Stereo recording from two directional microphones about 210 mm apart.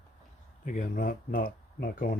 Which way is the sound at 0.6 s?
35° left (ahead or behind).